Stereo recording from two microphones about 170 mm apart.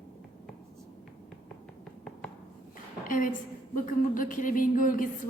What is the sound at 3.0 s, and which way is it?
A woman's voice, 50° left (ahead or behind).